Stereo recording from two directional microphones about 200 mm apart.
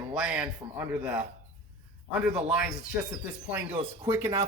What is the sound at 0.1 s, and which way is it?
A man's voice, 5° right (ahead or behind).